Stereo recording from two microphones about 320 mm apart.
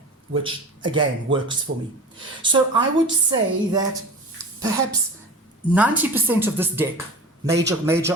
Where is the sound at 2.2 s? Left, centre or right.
Centre.